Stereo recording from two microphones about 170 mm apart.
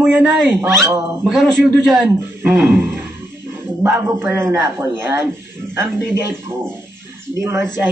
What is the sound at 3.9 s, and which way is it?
Speech, 10° right (ahead or behind).